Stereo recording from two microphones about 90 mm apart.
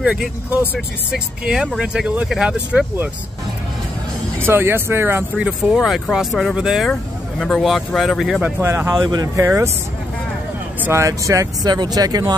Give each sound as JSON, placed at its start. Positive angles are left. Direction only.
{"t": 0.0, "sound": "speech", "side_deg": -10}
{"t": 4.4, "sound": "speech", "side_deg": -25}
{"t": 5.8, "sound": "speech", "side_deg": 0}
{"t": 8.5, "sound": "speech", "side_deg": -30}
{"t": 9.0, "sound": "speech", "side_deg": -50}
{"t": 9.4, "sound": "speech", "side_deg": -30}
{"t": 10.8, "sound": "speech", "side_deg": -30}
{"t": 11.7, "sound": "speech", "side_deg": -50}